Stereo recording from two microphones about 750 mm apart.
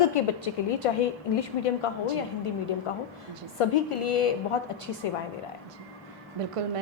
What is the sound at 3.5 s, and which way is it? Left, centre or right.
A woman's voice, left.